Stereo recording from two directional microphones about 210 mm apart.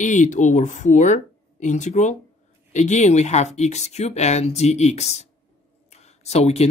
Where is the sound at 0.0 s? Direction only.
35° left (ahead or behind).